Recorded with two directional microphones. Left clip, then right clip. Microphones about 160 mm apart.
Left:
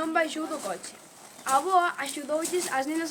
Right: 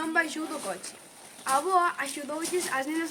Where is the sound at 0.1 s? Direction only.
60° left (ahead or behind).